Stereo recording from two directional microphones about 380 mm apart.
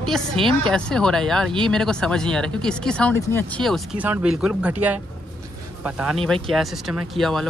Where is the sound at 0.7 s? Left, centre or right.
Centre.